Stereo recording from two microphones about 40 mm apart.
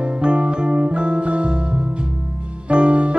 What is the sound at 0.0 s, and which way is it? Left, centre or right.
Music, right.